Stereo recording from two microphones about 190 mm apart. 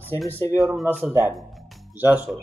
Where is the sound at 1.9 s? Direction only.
10° right (ahead or behind).